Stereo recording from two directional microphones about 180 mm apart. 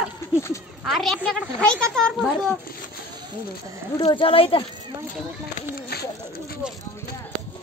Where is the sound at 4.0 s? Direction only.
30° left (ahead or behind).